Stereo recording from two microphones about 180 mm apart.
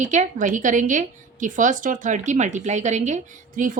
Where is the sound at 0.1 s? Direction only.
45° right (ahead or behind).